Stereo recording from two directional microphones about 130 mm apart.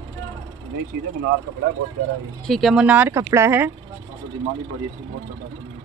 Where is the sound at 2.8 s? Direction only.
15° right (ahead or behind).